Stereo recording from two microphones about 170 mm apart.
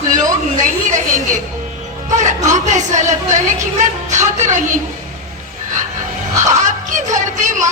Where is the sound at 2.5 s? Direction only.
45° right (ahead or behind).